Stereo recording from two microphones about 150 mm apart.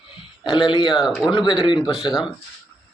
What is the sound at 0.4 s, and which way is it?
Speech, 30° left (ahead or behind).